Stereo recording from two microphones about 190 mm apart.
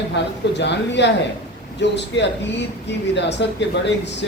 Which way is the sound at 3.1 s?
65° left (ahead or behind).